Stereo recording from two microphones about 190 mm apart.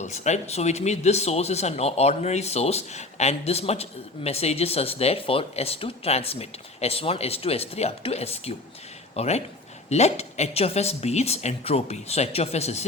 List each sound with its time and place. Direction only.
0.0 s speech: 35° left (ahead or behind)